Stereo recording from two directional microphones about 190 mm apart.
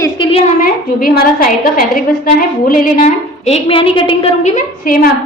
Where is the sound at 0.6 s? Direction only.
50° left (ahead or behind).